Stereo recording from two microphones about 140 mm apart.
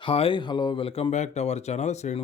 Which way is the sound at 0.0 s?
40° left (ahead or behind).